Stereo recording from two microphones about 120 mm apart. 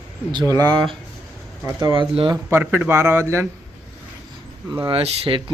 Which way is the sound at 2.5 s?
20° right (ahead or behind).